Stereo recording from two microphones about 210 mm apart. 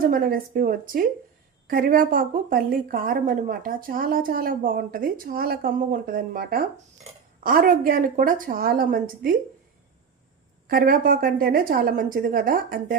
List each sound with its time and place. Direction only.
0.0 s a woman's voice: 40° right (ahead or behind)
10.7 s a woman's voice: 45° right (ahead or behind)